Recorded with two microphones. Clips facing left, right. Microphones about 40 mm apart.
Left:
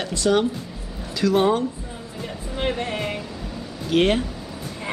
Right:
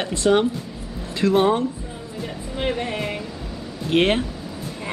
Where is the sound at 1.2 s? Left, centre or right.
Centre.